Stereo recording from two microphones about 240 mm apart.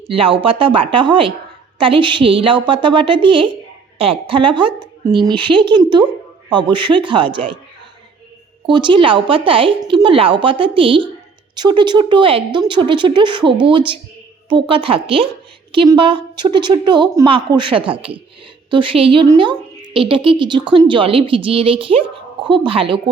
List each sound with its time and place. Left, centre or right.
0.1 s a woman's voice: right
8.6 s a woman's voice: centre